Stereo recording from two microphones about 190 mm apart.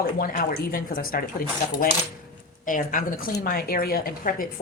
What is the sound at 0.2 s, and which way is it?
A woman's voice, 50° left (ahead or behind).